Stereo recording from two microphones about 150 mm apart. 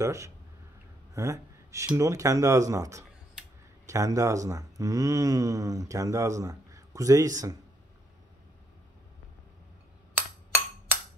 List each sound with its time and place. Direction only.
0.0 s speech: 20° right (ahead or behind)
1.1 s a sound: 20° right (ahead or behind)
2.0 s speech: 20° right (ahead or behind)